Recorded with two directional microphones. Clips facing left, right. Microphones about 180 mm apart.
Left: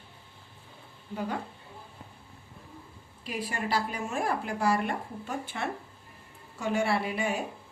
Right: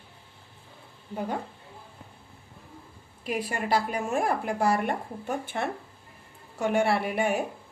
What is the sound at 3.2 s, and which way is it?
A woman's voice, 50° right (ahead or behind).